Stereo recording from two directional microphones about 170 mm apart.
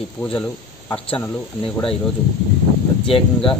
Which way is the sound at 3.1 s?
35° left (ahead or behind).